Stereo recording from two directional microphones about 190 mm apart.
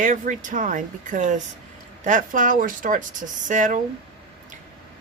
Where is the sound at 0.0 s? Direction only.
40° right (ahead or behind).